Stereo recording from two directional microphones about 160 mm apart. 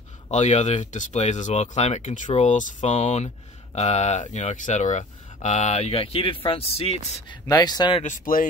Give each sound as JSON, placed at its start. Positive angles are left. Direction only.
{"t": 0.3, "sound": "speech", "side_deg": 45}
{"t": 7.2, "sound": "speech", "side_deg": 25}
{"t": 8.0, "sound": "speech", "side_deg": 55}